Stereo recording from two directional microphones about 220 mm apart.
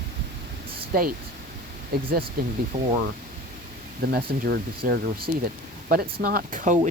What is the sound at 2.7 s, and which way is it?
Speech, 40° right (ahead or behind).